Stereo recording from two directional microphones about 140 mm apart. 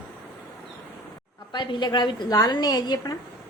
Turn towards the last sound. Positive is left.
turn(degrees=30)  # may be behind; listen again after turning